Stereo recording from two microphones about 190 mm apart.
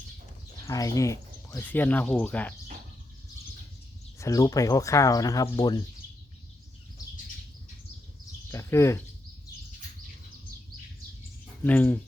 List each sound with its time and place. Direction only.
0.6 s speech: 15° left (ahead or behind)
4.2 s speech: 15° left (ahead or behind)
8.4 s speech: 15° left (ahead or behind)
11.6 s speech: 10° left (ahead or behind)